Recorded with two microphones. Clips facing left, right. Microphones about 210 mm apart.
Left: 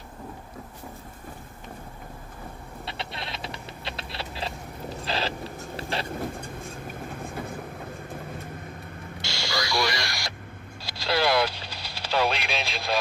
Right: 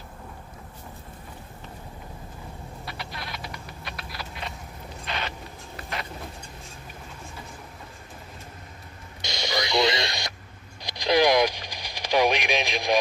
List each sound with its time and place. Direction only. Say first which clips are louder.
2.8 s typing: left 3 dB; 25° left (ahead or behind)
5.0 s owl: left 4 dB; 35° left (ahead or behind)
5.8 s vehicle: left 4 dB; 30° left (ahead or behind)
9.2 s radio: right 3 dB; 20° right (ahead or behind)
10.8 s vehicle: right 5 dB; 15° right (ahead or behind)